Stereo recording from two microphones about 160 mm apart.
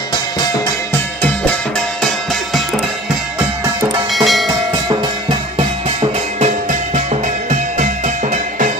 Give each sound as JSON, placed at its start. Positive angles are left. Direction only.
{"t": 4.1, "sound": "music", "side_deg": 0}
{"t": 5.9, "sound": "music", "side_deg": -45}